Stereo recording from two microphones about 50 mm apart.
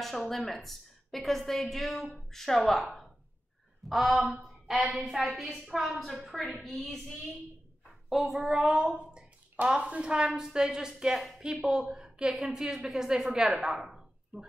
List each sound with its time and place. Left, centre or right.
0.3 s a woman's voice: centre